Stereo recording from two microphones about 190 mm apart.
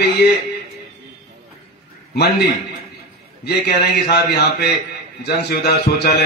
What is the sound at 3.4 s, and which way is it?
A man's voice, 60° left (ahead or behind).